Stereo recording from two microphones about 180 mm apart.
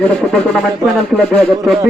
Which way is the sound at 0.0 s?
Centre (ahead or behind).